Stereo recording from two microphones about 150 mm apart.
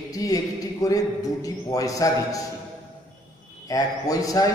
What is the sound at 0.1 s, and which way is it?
A man's voice, 25° left (ahead or behind).